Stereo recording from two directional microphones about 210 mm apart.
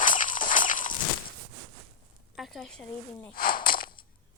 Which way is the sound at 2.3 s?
Centre (ahead or behind).